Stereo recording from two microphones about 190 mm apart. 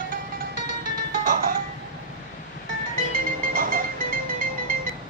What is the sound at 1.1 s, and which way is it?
Music, 45° right (ahead or behind).